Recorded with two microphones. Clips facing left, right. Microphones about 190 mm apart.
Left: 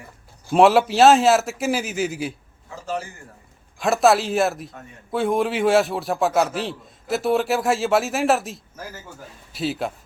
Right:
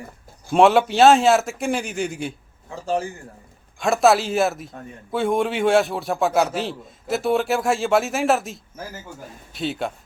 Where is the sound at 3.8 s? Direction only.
Centre (ahead or behind).